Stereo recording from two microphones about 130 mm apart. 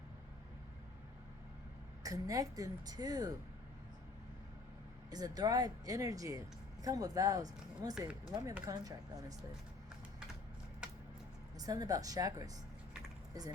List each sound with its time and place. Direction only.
2.0 s a woman's voice: 25° right (ahead or behind)
5.1 s a woman's voice: 30° right (ahead or behind)
11.6 s a woman's voice: 30° right (ahead or behind)